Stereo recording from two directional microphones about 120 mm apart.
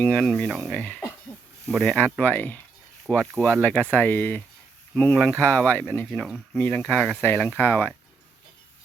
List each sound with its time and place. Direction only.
0.0 s speech: 10° left (ahead or behind)